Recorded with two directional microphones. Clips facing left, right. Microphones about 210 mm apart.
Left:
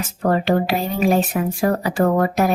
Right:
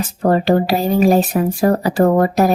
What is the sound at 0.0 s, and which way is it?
Speech, 35° right (ahead or behind).